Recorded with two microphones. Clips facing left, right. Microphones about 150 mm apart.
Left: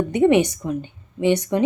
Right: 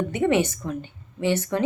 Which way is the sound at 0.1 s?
20° left (ahead or behind).